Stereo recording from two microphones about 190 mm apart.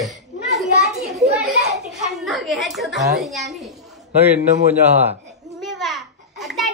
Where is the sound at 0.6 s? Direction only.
Centre (ahead or behind).